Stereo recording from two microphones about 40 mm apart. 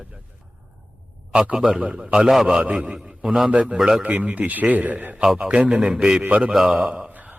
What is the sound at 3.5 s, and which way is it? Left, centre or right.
Speech, right.